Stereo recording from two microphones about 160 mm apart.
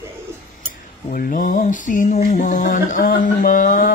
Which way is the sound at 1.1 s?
55° left (ahead or behind).